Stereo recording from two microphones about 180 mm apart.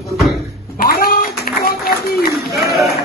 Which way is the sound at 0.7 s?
55° left (ahead or behind).